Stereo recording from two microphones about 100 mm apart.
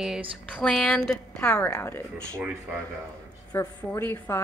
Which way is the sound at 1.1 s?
20° left (ahead or behind).